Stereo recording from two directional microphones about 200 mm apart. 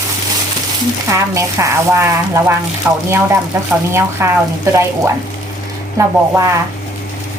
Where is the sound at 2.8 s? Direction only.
5° right (ahead or behind).